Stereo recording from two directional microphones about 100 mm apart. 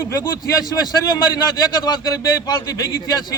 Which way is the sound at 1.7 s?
40° left (ahead or behind).